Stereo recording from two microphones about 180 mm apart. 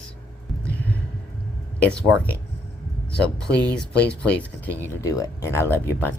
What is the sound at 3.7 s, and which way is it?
Speech, 5° left (ahead or behind).